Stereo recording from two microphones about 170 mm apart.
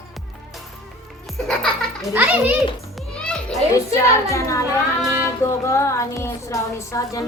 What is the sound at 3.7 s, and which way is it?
A woman's voice, 20° left (ahead or behind).